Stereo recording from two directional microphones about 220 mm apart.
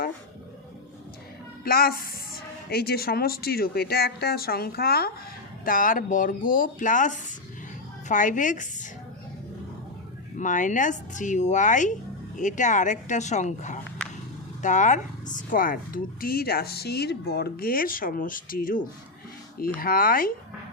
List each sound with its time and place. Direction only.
1.6 s a woman's voice: 40° left (ahead or behind)
10.3 s speech: 35° left (ahead or behind)